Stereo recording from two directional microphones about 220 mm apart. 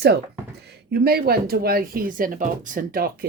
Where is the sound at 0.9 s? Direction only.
45° right (ahead or behind).